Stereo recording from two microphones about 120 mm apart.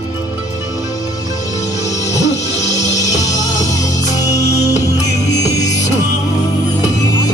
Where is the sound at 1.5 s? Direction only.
30° left (ahead or behind).